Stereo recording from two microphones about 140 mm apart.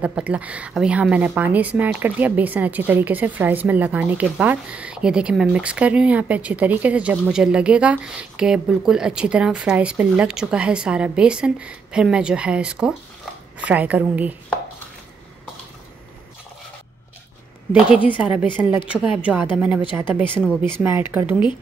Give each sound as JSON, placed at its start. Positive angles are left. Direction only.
{"t": 0.0, "sound": "a woman's voice", "side_deg": -10}
{"t": 17.7, "sound": "a woman's voice", "side_deg": -10}